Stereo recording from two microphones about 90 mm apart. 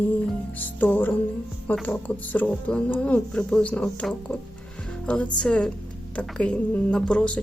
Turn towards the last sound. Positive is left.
turn(degrees=10)  # may be behind; listen again after turning